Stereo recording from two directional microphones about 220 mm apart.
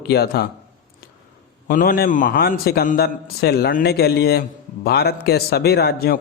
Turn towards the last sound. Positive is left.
turn(degrees=45)  # may be behind; listen again after turning